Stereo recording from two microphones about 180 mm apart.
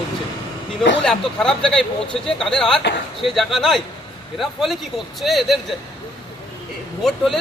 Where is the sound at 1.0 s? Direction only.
5° left (ahead or behind).